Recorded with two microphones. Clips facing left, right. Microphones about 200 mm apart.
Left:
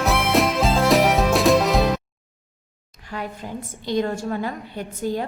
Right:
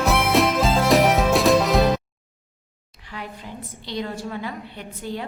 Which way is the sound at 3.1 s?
45° left (ahead or behind).